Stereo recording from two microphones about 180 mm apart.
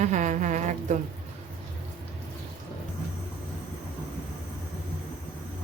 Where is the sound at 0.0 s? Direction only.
40° right (ahead or behind).